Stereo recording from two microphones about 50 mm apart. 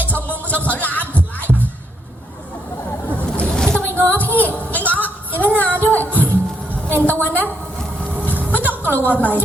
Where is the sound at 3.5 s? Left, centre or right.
Centre.